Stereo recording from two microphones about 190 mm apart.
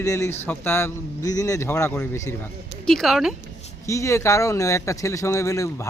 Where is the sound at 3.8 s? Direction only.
15° left (ahead or behind).